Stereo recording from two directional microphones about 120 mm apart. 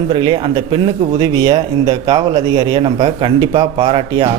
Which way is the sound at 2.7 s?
50° right (ahead or behind).